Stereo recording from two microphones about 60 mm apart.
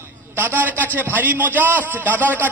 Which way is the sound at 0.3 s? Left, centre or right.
Right.